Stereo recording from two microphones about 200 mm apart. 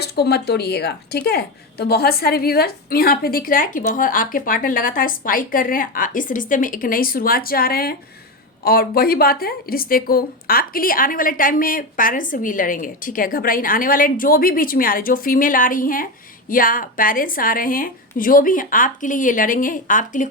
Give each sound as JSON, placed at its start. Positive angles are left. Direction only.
{"t": 0.0, "sound": "a woman's voice", "side_deg": 55}